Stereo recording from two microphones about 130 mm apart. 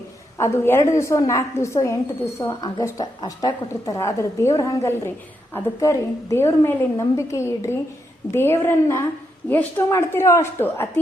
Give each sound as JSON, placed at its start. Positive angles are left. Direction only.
{"t": 0.3, "sound": "a woman's voice", "side_deg": 20}
{"t": 2.5, "sound": "a woman's voice", "side_deg": 35}